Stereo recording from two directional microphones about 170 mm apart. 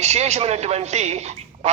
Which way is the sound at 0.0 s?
40° right (ahead or behind).